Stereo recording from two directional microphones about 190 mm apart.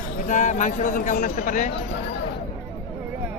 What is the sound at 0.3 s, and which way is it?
Speech, 40° left (ahead or behind).